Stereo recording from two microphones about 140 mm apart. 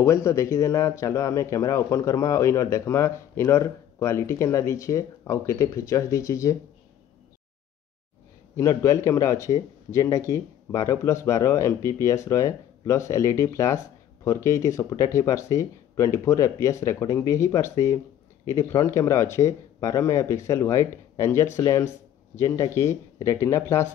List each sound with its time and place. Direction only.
0.0 s speech: 20° left (ahead or behind)
8.5 s speech: 20° left (ahead or behind)